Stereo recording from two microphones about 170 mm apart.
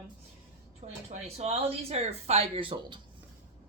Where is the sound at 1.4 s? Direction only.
40° right (ahead or behind).